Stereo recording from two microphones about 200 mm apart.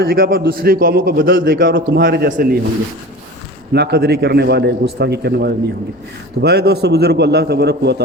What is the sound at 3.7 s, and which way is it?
A man's voice, 55° right (ahead or behind).